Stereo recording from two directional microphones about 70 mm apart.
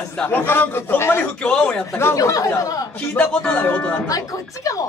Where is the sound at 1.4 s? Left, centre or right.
Centre.